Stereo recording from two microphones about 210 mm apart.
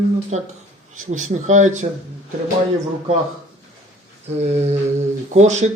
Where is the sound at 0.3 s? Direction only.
35° right (ahead or behind).